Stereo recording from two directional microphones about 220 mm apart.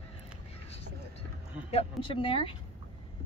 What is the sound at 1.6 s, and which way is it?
Speech, 25° left (ahead or behind).